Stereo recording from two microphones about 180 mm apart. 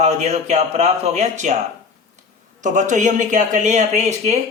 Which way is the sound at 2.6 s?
45° right (ahead or behind).